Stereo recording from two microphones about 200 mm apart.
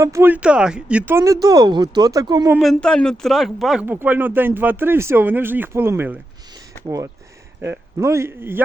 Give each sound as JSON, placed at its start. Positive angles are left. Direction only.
{"t": 0.0, "sound": "speech", "side_deg": -15}
{"t": 2.6, "sound": "speech", "side_deg": 0}